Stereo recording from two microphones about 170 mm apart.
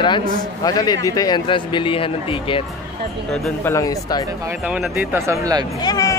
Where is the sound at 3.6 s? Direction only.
20° left (ahead or behind).